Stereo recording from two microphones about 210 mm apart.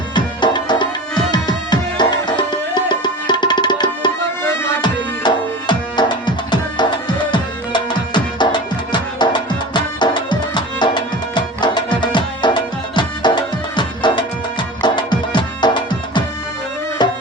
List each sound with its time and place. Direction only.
0.1 s music: 20° left (ahead or behind)